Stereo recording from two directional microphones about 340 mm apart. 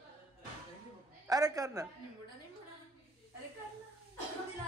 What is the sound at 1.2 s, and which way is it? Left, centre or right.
Speech, centre.